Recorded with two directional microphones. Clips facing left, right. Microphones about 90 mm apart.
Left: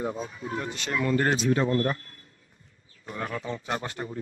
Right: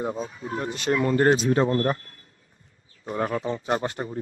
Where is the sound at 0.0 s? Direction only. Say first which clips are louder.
Right 2 dB; 35° right (ahead or behind).